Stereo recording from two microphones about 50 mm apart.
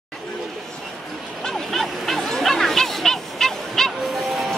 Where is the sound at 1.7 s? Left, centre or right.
Centre.